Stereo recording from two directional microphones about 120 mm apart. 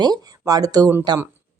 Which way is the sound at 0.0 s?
35° right (ahead or behind).